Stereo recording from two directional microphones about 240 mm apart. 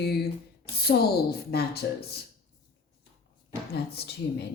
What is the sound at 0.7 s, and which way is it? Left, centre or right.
Speech, left.